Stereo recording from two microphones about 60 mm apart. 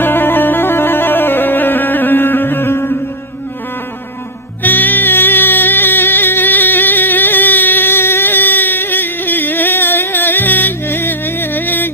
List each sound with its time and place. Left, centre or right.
0.0 s music: left
4.6 s music: left